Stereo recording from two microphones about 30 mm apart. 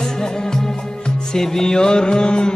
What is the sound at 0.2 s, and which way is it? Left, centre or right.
Music, left.